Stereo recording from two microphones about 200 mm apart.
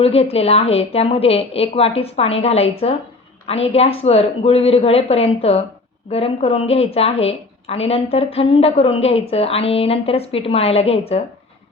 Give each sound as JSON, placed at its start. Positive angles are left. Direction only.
{"t": 0.0, "sound": "a woman's voice", "side_deg": 30}